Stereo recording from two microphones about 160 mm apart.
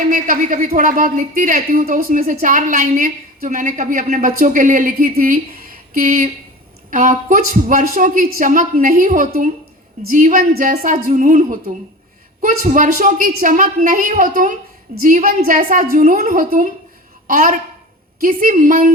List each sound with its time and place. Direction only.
0.1 s a woman's voice: 55° right (ahead or behind)